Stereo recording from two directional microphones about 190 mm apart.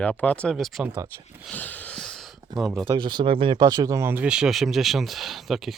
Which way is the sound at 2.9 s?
25° right (ahead or behind).